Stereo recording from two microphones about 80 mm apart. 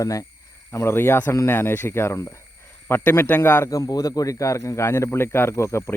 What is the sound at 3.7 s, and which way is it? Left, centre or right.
A man's voice, left.